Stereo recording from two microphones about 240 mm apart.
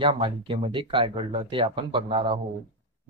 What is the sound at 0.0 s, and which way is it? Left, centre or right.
Speech, right.